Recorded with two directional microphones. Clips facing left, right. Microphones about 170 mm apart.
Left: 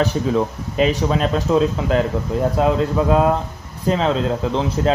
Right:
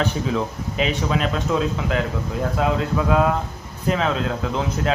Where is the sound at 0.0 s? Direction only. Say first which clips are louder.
Left 4 dB; 40° left (ahead or behind).